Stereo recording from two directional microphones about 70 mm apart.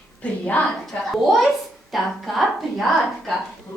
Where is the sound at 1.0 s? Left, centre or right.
Centre.